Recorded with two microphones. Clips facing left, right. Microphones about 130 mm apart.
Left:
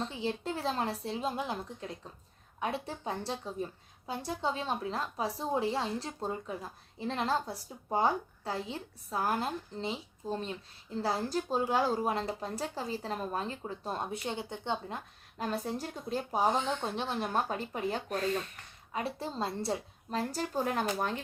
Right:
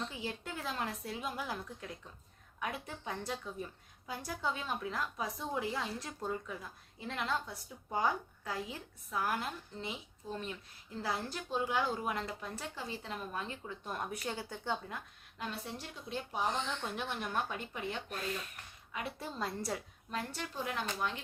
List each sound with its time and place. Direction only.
0.0 s a woman's voice: 30° left (ahead or behind)
15.4 s a woman's voice: 40° left (ahead or behind)